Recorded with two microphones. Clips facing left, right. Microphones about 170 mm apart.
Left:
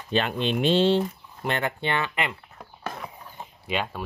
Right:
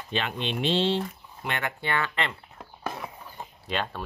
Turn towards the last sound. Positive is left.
turn(degrees=10)  # may be behind; listen again after turning